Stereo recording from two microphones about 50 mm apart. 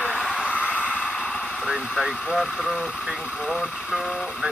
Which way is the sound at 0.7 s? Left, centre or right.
Left.